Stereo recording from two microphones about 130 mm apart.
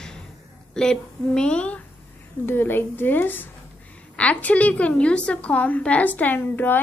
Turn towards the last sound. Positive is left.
turn(degrees=15)  # may be behind; listen again after turning